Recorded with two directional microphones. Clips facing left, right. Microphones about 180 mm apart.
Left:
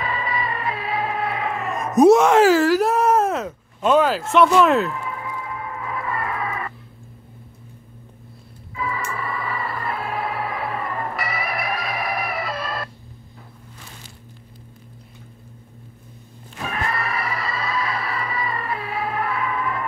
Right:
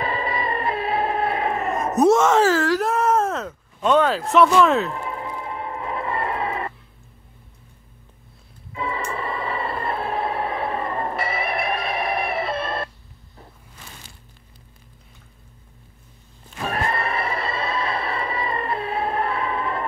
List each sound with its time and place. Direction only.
0.0 s music: 30° right (ahead or behind)
0.9 s a sound: 35° right (ahead or behind)
2.0 s speech: 10° left (ahead or behind)
4.9 s music: 30° right (ahead or behind)
8.7 s a sound: 25° right (ahead or behind)
16.7 s music: 30° right (ahead or behind)